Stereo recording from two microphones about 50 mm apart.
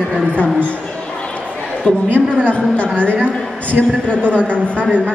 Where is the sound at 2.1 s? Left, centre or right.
Right.